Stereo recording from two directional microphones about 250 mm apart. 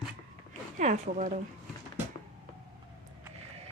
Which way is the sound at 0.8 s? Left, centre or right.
Right.